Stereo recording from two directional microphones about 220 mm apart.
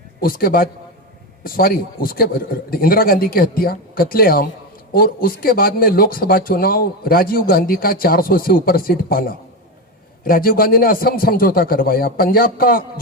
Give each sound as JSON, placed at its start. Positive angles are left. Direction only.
{"t": 0.2, "sound": "speech", "side_deg": 40}